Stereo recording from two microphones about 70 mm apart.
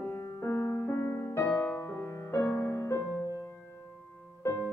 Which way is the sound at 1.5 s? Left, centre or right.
Left.